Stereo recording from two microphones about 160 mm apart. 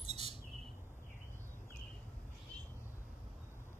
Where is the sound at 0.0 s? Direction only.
40° right (ahead or behind).